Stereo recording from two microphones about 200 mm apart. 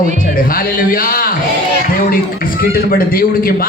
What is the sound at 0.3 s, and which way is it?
A man's voice, 45° left (ahead or behind).